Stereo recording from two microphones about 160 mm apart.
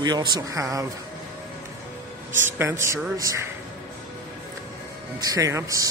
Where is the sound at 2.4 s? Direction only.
15° right (ahead or behind).